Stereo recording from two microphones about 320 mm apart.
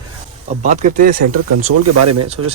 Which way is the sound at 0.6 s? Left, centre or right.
Right.